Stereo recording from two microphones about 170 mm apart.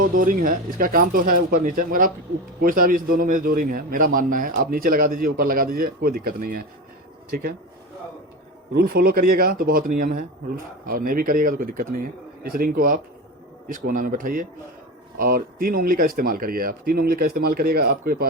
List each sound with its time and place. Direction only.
0.0 s a man's voice: 55° right (ahead or behind)
8.7 s a man's voice: 60° right (ahead or behind)